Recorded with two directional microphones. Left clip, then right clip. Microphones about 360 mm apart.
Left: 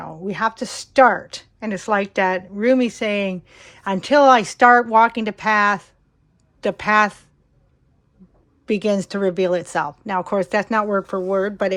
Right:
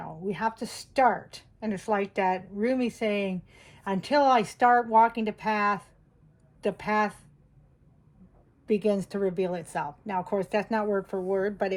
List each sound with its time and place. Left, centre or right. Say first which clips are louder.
0.3 s a woman's voice: left 8 dB; centre
8.6 s a woman's voice: left 6 dB; left